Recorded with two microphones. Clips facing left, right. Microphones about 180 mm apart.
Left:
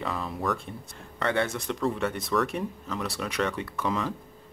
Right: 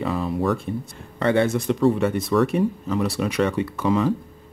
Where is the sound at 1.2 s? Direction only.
20° right (ahead or behind).